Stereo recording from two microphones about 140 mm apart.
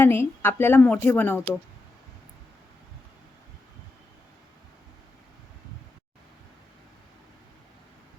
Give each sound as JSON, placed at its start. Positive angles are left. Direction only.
{"t": 0.0, "sound": "speech", "side_deg": 15}